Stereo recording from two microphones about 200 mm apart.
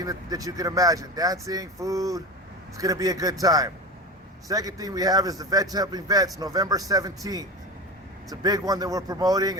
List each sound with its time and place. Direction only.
0.0 s a man's voice: 20° right (ahead or behind)